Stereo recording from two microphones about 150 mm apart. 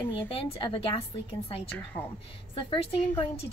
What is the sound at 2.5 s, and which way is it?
Speech, 35° left (ahead or behind).